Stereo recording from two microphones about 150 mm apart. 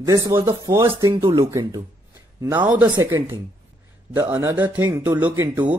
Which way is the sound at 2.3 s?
25° right (ahead or behind).